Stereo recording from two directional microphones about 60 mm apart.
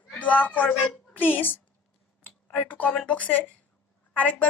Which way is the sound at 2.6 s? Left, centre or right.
Left.